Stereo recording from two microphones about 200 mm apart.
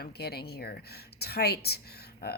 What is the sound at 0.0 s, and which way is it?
Speech, 50° left (ahead or behind).